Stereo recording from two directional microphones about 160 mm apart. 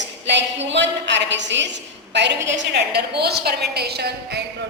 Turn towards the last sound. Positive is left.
turn(degrees=-90)